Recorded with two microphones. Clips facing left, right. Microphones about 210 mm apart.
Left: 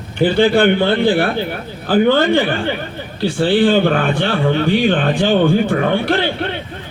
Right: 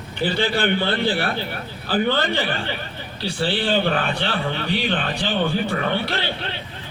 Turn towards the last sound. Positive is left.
turn(degrees=50)  # may be behind; listen again after turning